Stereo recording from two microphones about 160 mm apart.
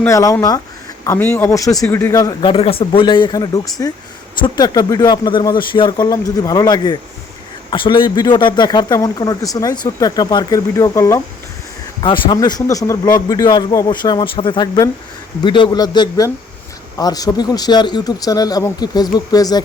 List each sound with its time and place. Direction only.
0.0 s speech: 20° left (ahead or behind)
2.5 s speech: 35° left (ahead or behind); by 11.2 s 20° left (ahead or behind)
11.9 s speech: 30° left (ahead or behind)